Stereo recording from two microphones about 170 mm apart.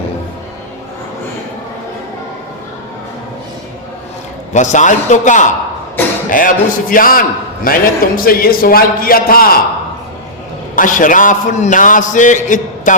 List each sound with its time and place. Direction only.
4.5 s a man's voice: 45° left (ahead or behind)
10.8 s a man's voice: 50° left (ahead or behind)